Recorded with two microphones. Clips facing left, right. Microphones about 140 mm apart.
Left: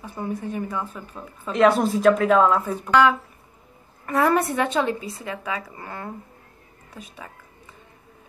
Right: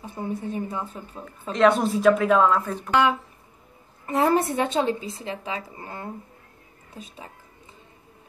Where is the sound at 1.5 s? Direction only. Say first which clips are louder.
Left 1 dB; 5° left (ahead or behind).